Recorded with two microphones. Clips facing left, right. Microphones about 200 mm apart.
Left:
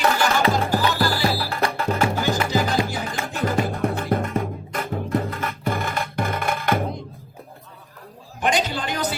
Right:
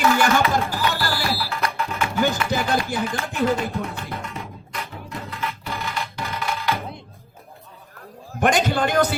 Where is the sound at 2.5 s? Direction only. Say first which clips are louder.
Left 1 dB; 55° right (ahead or behind).